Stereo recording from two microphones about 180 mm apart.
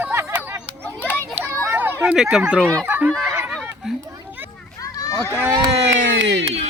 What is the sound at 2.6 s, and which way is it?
Speech, 5° left (ahead or behind).